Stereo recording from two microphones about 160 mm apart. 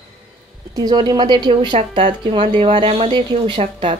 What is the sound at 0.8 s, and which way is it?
Speech, 25° right (ahead or behind).